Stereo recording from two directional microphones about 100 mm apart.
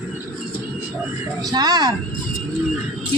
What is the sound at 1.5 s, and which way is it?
Speech, 40° right (ahead or behind).